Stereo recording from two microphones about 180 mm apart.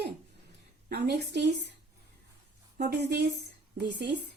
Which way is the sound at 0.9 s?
65° right (ahead or behind).